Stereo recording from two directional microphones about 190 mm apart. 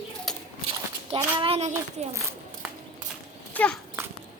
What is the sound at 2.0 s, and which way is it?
Speech, 35° right (ahead or behind).